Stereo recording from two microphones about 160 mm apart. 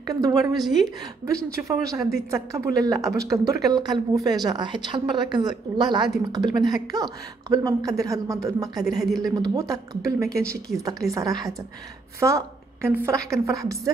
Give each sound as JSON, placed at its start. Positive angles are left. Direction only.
{"t": 0.0, "sound": "speech", "side_deg": -25}
{"t": 8.8, "sound": "a woman's voice", "side_deg": 0}
{"t": 9.2, "sound": "a woman's voice", "side_deg": -20}